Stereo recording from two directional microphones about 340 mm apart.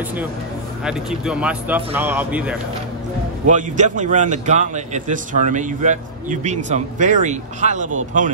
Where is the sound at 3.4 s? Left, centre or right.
Right.